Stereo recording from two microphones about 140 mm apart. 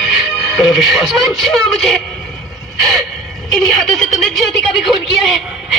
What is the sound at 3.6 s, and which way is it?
A woman's voice, centre (ahead or behind).